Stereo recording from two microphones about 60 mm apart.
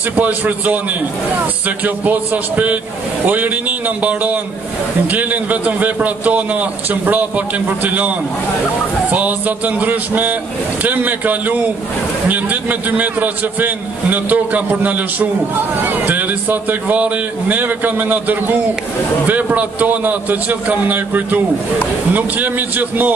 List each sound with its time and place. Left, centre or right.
0.1 s a man's voice: right
1.9 s a man's voice: right
9.1 s a man's voice: right